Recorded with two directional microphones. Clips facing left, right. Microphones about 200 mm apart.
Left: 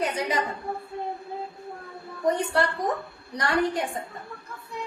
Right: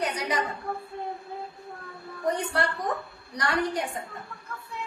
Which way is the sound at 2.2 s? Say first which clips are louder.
Left 3 dB; 25° left (ahead or behind).